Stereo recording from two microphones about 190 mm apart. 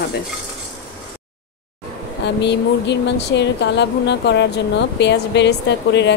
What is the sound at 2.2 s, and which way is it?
A woman's voice, 65° left (ahead or behind).